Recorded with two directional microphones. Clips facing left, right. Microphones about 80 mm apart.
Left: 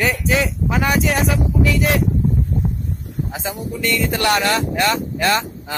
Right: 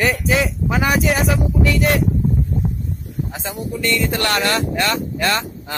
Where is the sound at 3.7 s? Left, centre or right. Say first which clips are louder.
Right 1 dB; centre.